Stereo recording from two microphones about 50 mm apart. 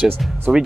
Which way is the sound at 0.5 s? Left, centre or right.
Centre.